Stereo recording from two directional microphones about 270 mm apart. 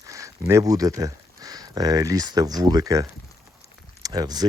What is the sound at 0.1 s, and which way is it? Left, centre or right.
Speech, centre.